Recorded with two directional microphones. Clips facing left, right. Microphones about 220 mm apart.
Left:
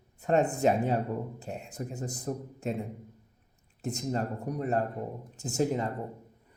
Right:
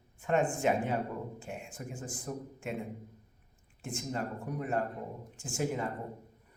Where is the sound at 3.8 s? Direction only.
40° left (ahead or behind).